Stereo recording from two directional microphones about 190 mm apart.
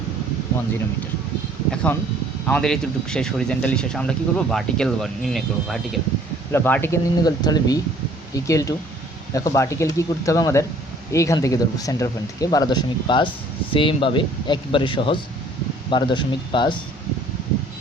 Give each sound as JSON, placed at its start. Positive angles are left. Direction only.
{"t": 1.7, "sound": "speech", "side_deg": 5}
{"t": 6.5, "sound": "speech", "side_deg": 10}